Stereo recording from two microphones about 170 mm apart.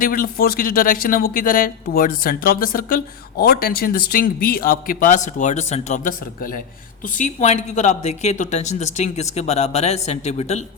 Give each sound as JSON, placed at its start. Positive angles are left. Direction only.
{"t": 0.0, "sound": "speech", "side_deg": 60}
{"t": 7.2, "sound": "speech", "side_deg": 45}